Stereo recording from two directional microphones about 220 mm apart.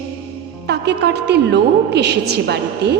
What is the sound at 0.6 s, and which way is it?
Music, 50° right (ahead or behind).